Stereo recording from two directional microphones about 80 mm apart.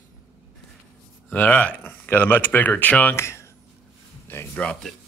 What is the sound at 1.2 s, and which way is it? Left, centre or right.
Speech, left.